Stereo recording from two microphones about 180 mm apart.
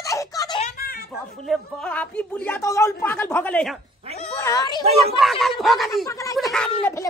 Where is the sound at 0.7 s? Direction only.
55° left (ahead or behind).